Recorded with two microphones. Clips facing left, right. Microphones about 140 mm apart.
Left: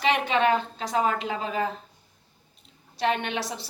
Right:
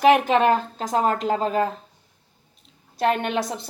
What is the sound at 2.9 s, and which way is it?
Speech, 45° right (ahead or behind).